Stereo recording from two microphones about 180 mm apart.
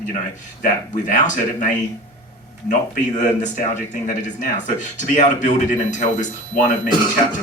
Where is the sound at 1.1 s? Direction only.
45° left (ahead or behind).